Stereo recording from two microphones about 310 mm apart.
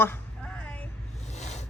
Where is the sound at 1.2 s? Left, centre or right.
Left.